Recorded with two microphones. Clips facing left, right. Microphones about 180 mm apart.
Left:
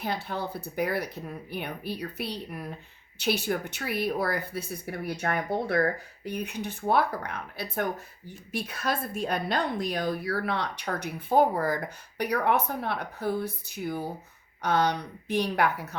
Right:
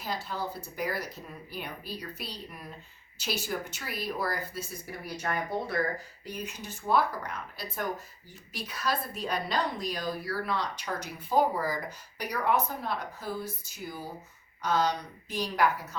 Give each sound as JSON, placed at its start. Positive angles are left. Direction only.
{"t": 0.0, "sound": "speech", "side_deg": 60}